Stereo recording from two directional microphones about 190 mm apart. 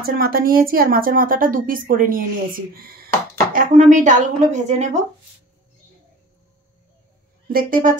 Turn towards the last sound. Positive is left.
turn(degrees=-45)  # may be behind; listen again after turning